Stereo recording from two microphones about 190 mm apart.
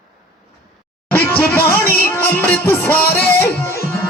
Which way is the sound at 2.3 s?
10° left (ahead or behind).